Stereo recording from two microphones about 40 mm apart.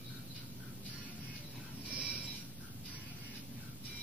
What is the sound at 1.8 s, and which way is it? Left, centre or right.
Train, right.